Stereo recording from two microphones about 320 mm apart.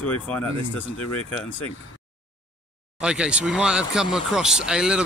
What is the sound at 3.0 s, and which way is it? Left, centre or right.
Speech, centre.